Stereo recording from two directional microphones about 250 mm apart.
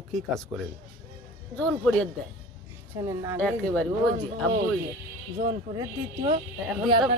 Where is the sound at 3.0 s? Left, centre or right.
Centre.